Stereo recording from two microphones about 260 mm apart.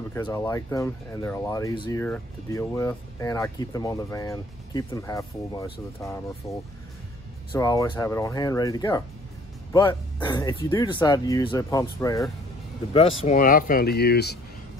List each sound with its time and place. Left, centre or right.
0.1 s speech: centre
13.2 s speech: left